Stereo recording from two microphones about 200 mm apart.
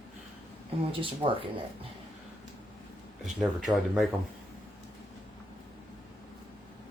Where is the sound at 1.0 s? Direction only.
25° right (ahead or behind).